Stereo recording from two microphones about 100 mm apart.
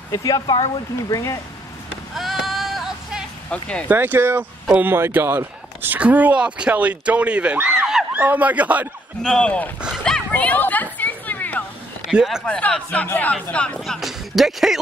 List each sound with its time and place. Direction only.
0.1 s speech: 35° left (ahead or behind)
2.1 s music: centre (ahead or behind)
3.4 s speech: 10° left (ahead or behind)
3.9 s speech: 20° right (ahead or behind)
9.2 s speech: 10° left (ahead or behind)
10.0 s a sound: 10° left (ahead or behind)
12.1 s speech: 5° right (ahead or behind)
12.4 s speech: 15° left (ahead or behind)
13.7 s speech: centre (ahead or behind)